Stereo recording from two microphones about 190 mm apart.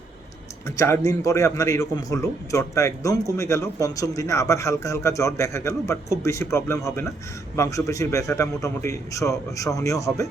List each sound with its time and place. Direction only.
0.8 s a man's voice: 15° left (ahead or behind)